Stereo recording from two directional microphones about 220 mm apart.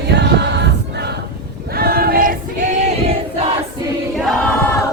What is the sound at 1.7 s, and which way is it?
Choir, 45° right (ahead or behind).